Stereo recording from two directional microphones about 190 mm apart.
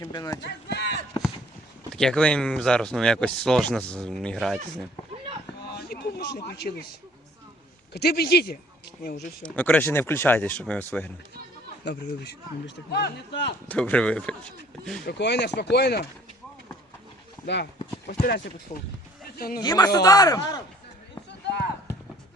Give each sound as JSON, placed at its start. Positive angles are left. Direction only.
{"t": 0.0, "sound": "speech", "side_deg": 20}
{"t": 0.4, "sound": "a sound", "side_deg": 60}
{"t": 1.9, "sound": "speech", "side_deg": 5}
{"t": 5.7, "sound": "a sound", "side_deg": 60}
{"t": 7.9, "sound": "a man's voice", "side_deg": 55}
{"t": 9.4, "sound": "speech", "side_deg": 10}
{"t": 11.9, "sound": "a man's voice", "side_deg": 60}
{"t": 13.7, "sound": "speech", "side_deg": 5}
{"t": 15.0, "sound": "a man's voice", "side_deg": 65}
{"t": 17.4, "sound": "speech", "side_deg": 65}
{"t": 18.1, "sound": "speech", "side_deg": 50}
{"t": 19.6, "sound": "speech", "side_deg": 20}
{"t": 21.2, "sound": "a sound", "side_deg": 65}